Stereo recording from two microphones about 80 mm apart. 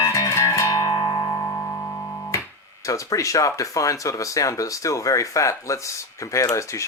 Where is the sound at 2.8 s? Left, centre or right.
Left.